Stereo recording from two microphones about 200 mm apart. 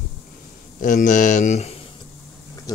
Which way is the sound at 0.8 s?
40° left (ahead or behind).